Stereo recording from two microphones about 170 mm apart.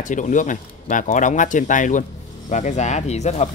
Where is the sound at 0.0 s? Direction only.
50° left (ahead or behind).